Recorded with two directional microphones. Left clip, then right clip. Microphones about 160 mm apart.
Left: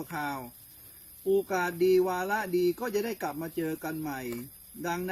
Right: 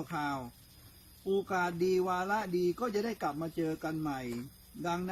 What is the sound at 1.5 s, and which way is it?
Speech, 15° right (ahead or behind).